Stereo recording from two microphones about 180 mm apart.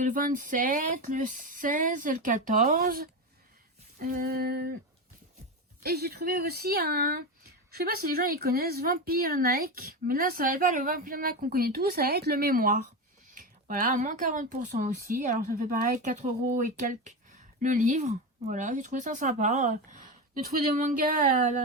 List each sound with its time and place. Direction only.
0.0 s speech: 50° right (ahead or behind)
5.8 s speech: 60° right (ahead or behind)